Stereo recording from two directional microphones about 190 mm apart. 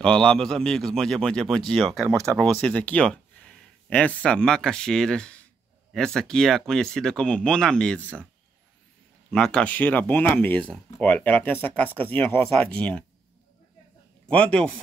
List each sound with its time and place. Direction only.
0.0 s speech: 5° left (ahead or behind)
2.0 s speech: 15° right (ahead or behind)
2.3 s speech: 5° left (ahead or behind)
9.3 s speech: 5° left (ahead or behind)
14.2 s speech: 5° left (ahead or behind)